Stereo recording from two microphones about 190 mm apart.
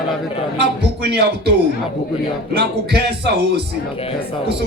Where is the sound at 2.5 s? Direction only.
60° right (ahead or behind).